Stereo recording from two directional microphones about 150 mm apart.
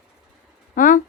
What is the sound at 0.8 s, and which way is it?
Speech, 65° left (ahead or behind).